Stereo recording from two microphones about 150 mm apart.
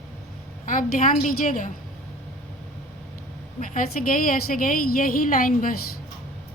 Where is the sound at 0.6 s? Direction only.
65° left (ahead or behind).